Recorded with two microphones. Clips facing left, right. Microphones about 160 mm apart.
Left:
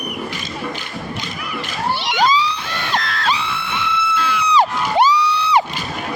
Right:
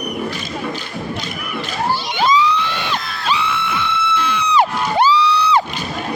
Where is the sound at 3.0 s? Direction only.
90° left.